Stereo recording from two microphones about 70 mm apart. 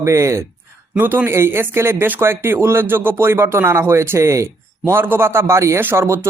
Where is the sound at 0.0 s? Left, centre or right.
Right.